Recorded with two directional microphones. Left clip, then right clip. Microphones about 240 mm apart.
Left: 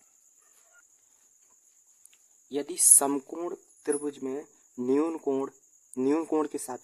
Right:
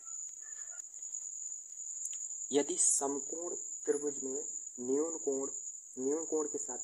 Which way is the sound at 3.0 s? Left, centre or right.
Left.